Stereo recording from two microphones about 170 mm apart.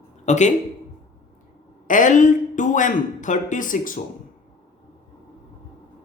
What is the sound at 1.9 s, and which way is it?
Speech, 50° left (ahead or behind).